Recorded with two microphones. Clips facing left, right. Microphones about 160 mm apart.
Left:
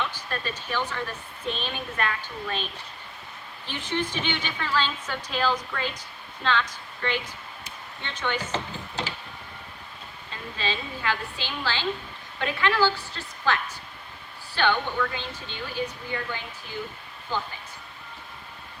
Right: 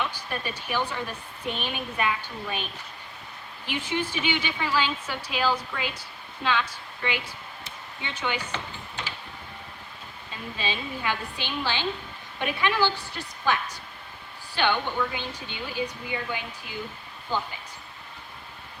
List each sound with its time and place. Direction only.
0.0 s speech: 15° right (ahead or behind)
3.7 s a woman's voice: 10° right (ahead or behind)
10.6 s speech: 15° right (ahead or behind)